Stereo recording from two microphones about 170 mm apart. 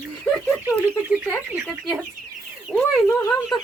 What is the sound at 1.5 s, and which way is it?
Speech, centre (ahead or behind).